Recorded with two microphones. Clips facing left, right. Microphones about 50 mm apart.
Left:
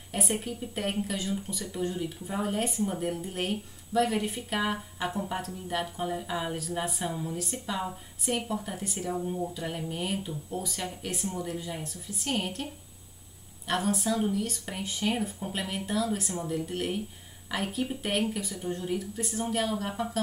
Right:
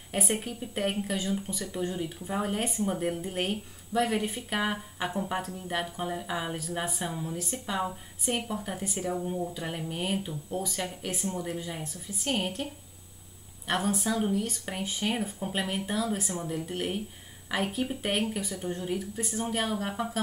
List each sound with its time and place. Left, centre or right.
0.3 s speech: centre
2.8 s speech: right
3.1 s speech: centre
13.7 s speech: centre